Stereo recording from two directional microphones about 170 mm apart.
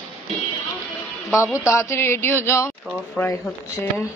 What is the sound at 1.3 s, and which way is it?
A woman's voice, 15° left (ahead or behind).